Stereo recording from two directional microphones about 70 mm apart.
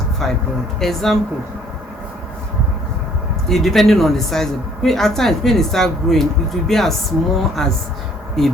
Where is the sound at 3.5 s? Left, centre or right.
Centre.